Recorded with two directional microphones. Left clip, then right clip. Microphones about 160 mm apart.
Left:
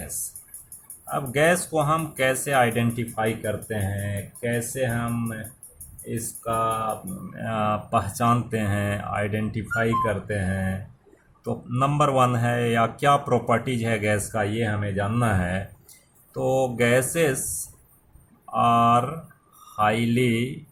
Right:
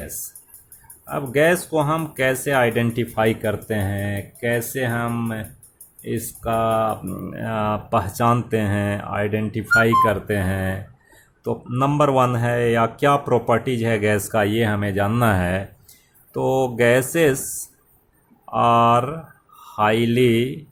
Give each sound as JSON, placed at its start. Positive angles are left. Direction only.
{"t": 1.1, "sound": "speech", "side_deg": -35}
{"t": 6.4, "sound": "a sound", "side_deg": -60}
{"t": 7.3, "sound": "speech", "side_deg": -40}
{"t": 11.4, "sound": "speech", "side_deg": -40}
{"t": 16.3, "sound": "speech", "side_deg": -40}
{"t": 18.5, "sound": "speech", "side_deg": -45}